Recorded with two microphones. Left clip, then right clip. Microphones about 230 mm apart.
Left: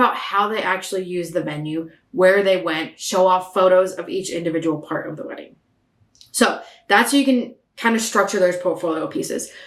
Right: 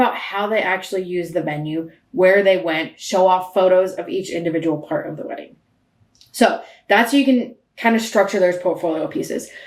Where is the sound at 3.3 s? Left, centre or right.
Left.